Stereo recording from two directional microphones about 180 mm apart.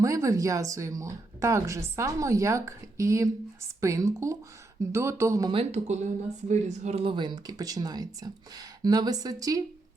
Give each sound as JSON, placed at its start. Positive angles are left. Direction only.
{"t": 0.0, "sound": "speech", "side_deg": -20}
{"t": 5.5, "sound": "speech", "side_deg": -35}